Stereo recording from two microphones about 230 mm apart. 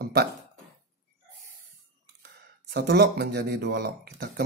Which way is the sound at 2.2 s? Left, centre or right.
Right.